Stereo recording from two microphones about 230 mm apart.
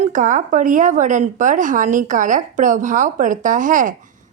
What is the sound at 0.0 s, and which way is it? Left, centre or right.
Speech, right.